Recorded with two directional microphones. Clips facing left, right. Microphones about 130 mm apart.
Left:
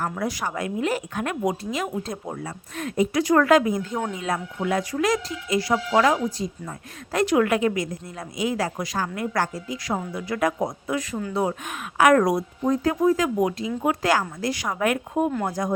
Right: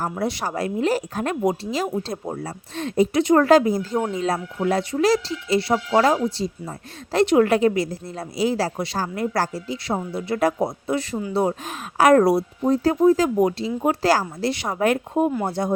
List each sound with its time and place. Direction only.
0.0 s a woman's voice: 30° right (ahead or behind)